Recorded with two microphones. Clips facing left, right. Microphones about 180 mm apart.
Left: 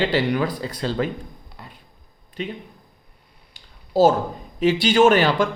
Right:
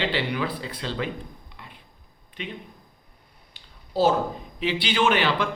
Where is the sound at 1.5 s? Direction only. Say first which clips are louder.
Left 3 dB; 40° left (ahead or behind).